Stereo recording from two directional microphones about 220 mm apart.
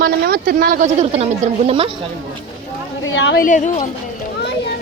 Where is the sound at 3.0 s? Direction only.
60° left (ahead or behind).